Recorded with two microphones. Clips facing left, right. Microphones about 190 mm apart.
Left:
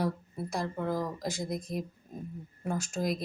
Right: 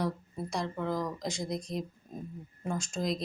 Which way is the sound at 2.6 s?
5° left (ahead or behind).